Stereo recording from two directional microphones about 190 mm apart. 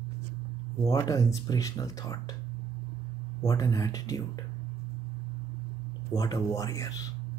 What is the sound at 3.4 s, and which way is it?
Speech, 20° left (ahead or behind).